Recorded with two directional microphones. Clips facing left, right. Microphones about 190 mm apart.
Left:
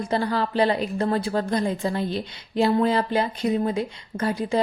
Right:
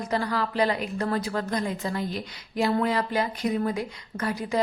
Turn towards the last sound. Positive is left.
turn(degrees=30)  # may be behind; listen again after turning